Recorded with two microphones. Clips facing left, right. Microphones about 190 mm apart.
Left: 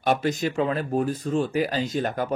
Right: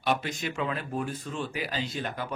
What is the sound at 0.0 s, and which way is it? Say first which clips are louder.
Speech: left 6 dB; 45° left (ahead or behind).